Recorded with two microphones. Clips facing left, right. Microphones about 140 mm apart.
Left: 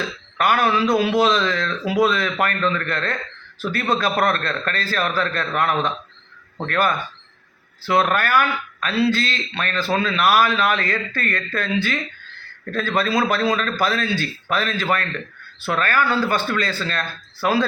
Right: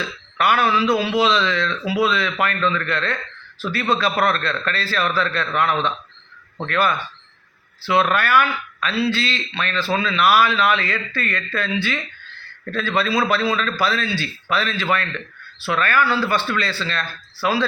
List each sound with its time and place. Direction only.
0.3 s a man's voice: 45° left (ahead or behind)